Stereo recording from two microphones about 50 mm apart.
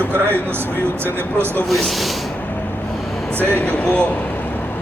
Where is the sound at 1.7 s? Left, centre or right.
Centre.